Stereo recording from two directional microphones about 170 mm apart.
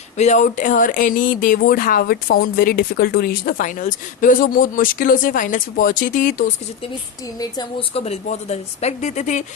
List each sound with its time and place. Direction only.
0.2 s speech: 45° left (ahead or behind)
7.3 s speech: 25° left (ahead or behind); by 9.4 s 45° left (ahead or behind)